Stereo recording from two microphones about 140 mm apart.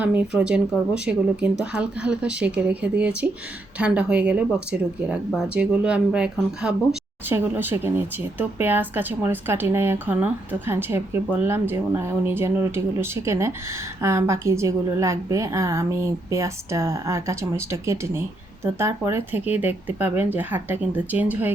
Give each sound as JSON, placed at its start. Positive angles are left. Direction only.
{"t": 0.0, "sound": "a woman's voice", "side_deg": -10}